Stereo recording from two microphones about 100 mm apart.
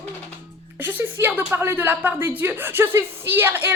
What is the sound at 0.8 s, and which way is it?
A woman's voice, 15° right (ahead or behind).